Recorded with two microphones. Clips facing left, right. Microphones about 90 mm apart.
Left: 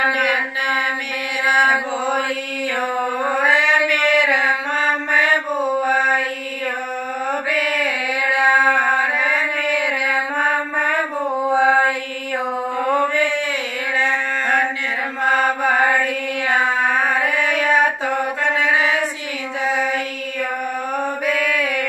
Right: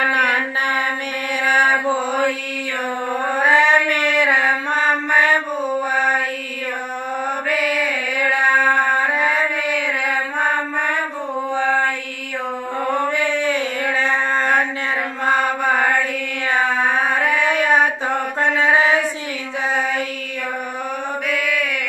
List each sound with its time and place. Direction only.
0.1 s mantra: 40° right (ahead or behind)
3.4 s mantra: 40° right (ahead or behind)
5.6 s mantra: centre (ahead or behind)
11.4 s mantra: 10° left (ahead or behind)
17.2 s a sound: 40° right (ahead or behind)
21.3 s mantra: 40° left (ahead or behind)